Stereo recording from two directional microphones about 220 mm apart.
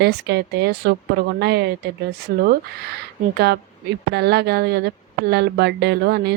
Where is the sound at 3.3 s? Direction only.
50° right (ahead or behind).